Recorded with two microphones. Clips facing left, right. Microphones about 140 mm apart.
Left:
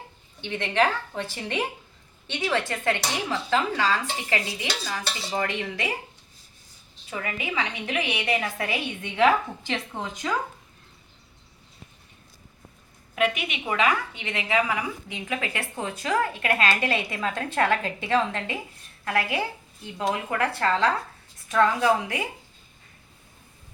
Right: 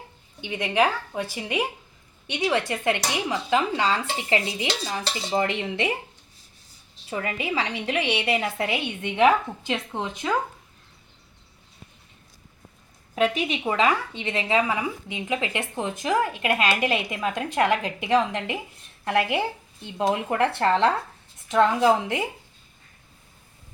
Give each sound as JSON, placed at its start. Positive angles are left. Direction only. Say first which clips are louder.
{"t": 0.4, "sound": "a woman's voice", "louder": "right 1 dB", "side_deg": -10}
{"t": 7.1, "sound": "a woman's voice", "louder": "right 3 dB", "side_deg": -30}
{"t": 13.1, "sound": "a woman's voice", "louder": "right 3 dB", "side_deg": -35}